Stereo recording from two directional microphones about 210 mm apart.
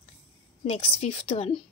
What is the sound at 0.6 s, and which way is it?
Speech, 30° left (ahead or behind).